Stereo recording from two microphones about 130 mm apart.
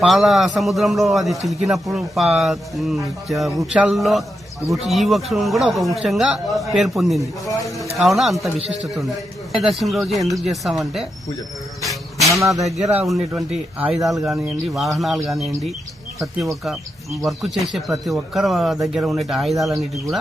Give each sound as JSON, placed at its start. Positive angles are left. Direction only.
{"t": 0.0, "sound": "speech", "side_deg": 0}
{"t": 7.4, "sound": "a man's voice", "side_deg": 25}
{"t": 7.9, "sound": "speech", "side_deg": 0}
{"t": 12.3, "sound": "speech", "side_deg": -25}
{"t": 13.1, "sound": "speech", "side_deg": 0}